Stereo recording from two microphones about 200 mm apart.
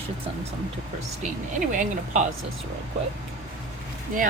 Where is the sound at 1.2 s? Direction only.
40° right (ahead or behind).